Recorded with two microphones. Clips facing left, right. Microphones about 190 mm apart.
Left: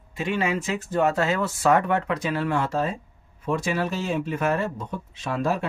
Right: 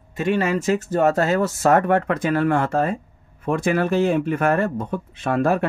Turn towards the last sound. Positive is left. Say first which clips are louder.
# right 6 dB
turn(degrees=-60)  # may be behind; listen again after turning